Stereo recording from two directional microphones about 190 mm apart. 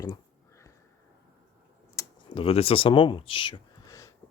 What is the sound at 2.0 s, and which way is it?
Computer keyboard, 15° left (ahead or behind).